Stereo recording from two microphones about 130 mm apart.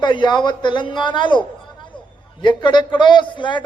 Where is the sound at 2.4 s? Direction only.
35° left (ahead or behind).